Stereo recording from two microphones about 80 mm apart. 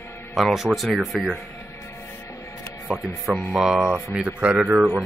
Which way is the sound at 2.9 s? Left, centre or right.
Centre.